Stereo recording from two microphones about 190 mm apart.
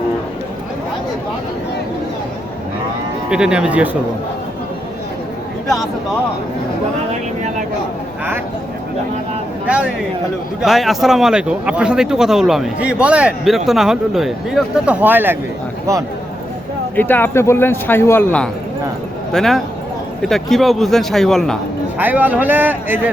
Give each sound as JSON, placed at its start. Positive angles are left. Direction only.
{"t": 3.2, "sound": "speech", "side_deg": -5}
{"t": 5.6, "sound": "speech", "side_deg": 0}
{"t": 9.6, "sound": "a man's voice", "side_deg": -5}
{"t": 16.9, "sound": "speech", "side_deg": 10}
{"t": 21.9, "sound": "a man's voice", "side_deg": -10}